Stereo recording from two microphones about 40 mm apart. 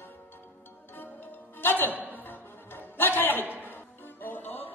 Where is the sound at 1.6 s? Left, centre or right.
Left.